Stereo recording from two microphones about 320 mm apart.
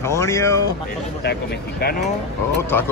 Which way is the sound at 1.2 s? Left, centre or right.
Left.